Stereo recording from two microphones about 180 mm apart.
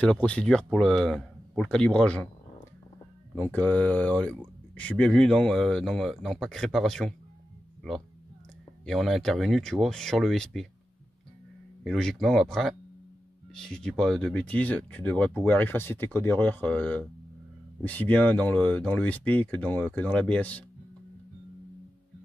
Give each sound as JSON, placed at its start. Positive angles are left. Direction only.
{"t": 0.0, "sound": "speech", "side_deg": 5}
{"t": 3.3, "sound": "speech", "side_deg": 10}
{"t": 8.8, "sound": "speech", "side_deg": 0}
{"t": 11.8, "sound": "speech", "side_deg": 0}